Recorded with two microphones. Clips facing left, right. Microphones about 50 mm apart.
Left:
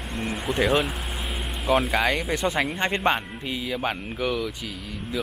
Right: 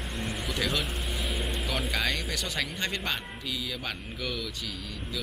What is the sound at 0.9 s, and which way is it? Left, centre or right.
Speech, centre.